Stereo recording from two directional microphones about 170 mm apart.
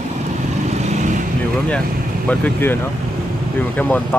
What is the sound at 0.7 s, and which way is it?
Vehicle, 45° right (ahead or behind).